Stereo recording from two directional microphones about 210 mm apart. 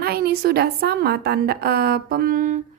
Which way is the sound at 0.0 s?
45° right (ahead or behind).